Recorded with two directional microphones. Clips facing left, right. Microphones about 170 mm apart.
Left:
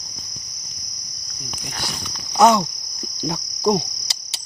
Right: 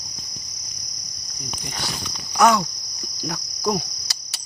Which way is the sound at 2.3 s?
20° left (ahead or behind).